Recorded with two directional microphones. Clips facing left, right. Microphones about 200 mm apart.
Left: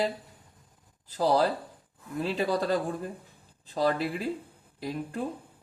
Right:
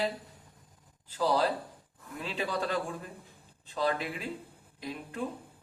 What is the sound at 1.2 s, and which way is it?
Speech, 40° left (ahead or behind).